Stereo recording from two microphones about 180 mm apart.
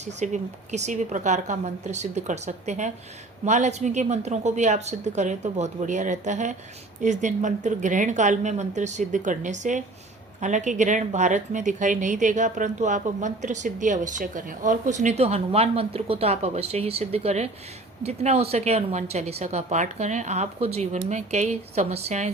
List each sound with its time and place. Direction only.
0.0 s speech: 40° right (ahead or behind)